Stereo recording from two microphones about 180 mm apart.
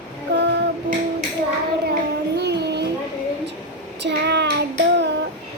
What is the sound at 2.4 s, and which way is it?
Child singing, 70° right (ahead or behind).